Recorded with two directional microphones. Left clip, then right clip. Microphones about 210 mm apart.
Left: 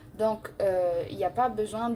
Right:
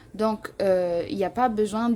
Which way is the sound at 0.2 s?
50° right (ahead or behind).